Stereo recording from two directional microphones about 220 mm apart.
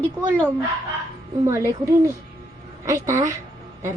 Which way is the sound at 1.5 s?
10° right (ahead or behind).